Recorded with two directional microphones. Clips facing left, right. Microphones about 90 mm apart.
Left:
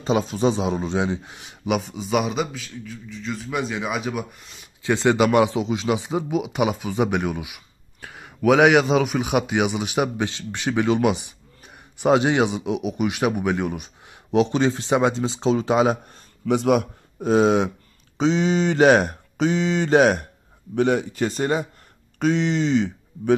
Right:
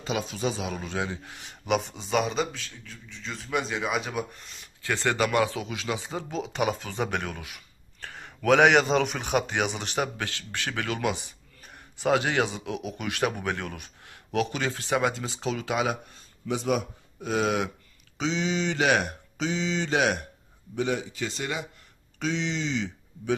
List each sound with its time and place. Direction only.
0.0 s a man's voice: 30° left (ahead or behind)
1.7 s a man's voice: centre (ahead or behind)
4.8 s speech: 20° left (ahead or behind)
16.4 s speech: 70° left (ahead or behind)
17.2 s a man's voice: 30° left (ahead or behind)
18.1 s speech: 40° left (ahead or behind)
19.3 s speech: 50° left (ahead or behind)
20.7 s speech: 60° left (ahead or behind)